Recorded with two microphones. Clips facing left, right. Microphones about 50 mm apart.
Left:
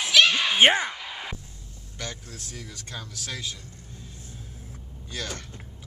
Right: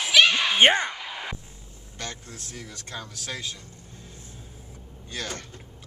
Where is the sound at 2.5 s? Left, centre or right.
Right.